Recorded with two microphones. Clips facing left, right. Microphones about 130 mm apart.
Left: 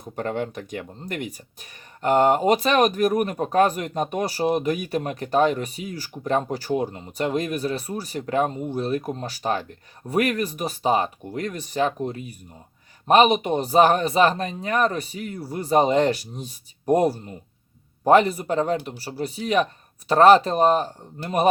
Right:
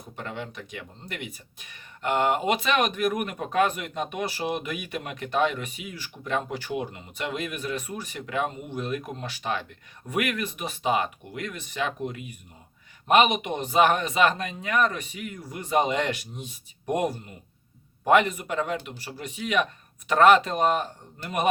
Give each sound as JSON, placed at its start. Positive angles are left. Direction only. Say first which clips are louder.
{"t": 0.2, "sound": "speech", "louder": "left 9 dB", "side_deg": 45}